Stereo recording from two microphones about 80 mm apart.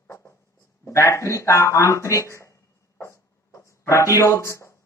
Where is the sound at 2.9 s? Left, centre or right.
Left.